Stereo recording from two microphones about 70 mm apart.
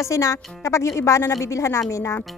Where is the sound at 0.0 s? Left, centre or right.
Left.